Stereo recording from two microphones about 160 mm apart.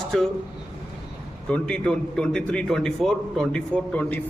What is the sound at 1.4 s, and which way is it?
A man's voice, 5° left (ahead or behind).